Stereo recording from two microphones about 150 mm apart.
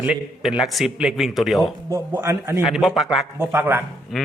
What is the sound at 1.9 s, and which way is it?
Speech, 15° right (ahead or behind).